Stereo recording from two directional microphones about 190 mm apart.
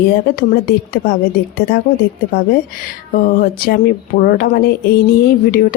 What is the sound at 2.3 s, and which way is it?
A woman's voice, 50° left (ahead or behind).